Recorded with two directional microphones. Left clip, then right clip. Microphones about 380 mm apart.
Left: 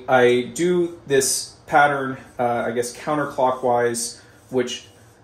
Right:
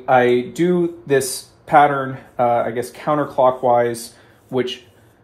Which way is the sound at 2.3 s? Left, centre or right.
Centre.